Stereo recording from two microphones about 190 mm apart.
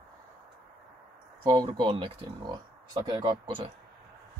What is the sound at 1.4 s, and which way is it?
Speech, 20° right (ahead or behind).